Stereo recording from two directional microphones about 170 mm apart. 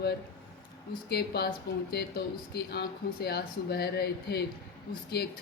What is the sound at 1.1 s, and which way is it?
Speech, 70° left (ahead or behind).